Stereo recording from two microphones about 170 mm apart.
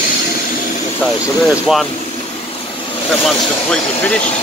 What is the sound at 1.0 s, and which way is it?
Speech, centre (ahead or behind).